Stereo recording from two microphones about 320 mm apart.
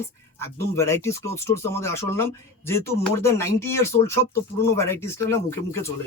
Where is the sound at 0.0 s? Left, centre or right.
Centre.